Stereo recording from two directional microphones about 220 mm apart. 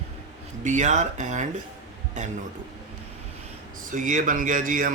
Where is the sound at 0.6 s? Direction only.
35° right (ahead or behind).